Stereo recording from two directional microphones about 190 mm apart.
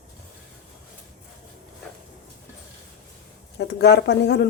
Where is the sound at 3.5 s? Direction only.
60° left (ahead or behind).